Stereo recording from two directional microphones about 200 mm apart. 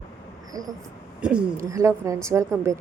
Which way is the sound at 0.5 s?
15° right (ahead or behind).